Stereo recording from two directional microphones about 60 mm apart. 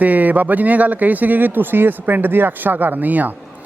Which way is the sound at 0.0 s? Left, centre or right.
Right.